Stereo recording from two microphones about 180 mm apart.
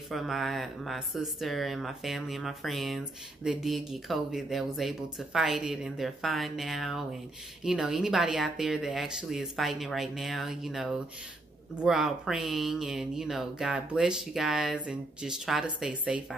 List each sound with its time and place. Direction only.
0.1 s speech: centre (ahead or behind)